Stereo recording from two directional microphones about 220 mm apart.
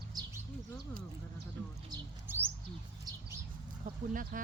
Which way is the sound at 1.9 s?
10° right (ahead or behind).